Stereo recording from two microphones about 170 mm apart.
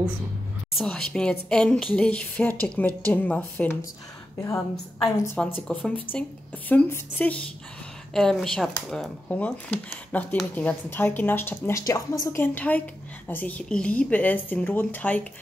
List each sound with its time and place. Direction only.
0.7 s speech: 5° left (ahead or behind)
4.4 s a woman's voice: 20° left (ahead or behind)
5.7 s speech: 5° left (ahead or behind)